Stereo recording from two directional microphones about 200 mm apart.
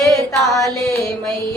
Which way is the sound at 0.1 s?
15° left (ahead or behind).